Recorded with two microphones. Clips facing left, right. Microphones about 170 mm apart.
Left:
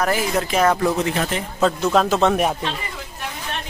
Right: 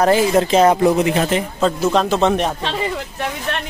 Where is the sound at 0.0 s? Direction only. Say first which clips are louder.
Right 7 dB; 25° right (ahead or behind).